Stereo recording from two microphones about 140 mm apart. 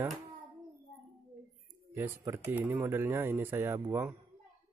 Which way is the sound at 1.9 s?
15° right (ahead or behind).